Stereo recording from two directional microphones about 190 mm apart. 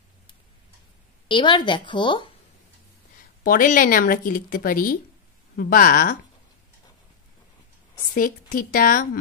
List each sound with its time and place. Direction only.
1.3 s a woman's voice: 25° left (ahead or behind)
3.4 s speech: 45° left (ahead or behind)
8.1 s speech: 45° left (ahead or behind)